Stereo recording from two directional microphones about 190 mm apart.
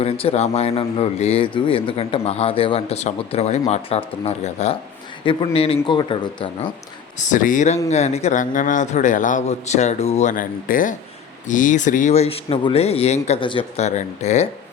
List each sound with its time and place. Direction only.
0.0 s a man's voice: 30° left (ahead or behind)
7.2 s speech: 40° left (ahead or behind)